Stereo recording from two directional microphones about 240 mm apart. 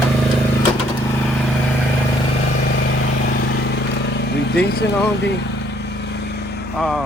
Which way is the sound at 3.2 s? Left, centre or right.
Left.